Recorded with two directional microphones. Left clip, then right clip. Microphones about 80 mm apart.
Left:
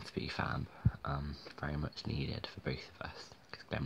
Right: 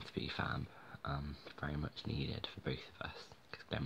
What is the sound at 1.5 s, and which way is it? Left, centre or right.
Speech, left.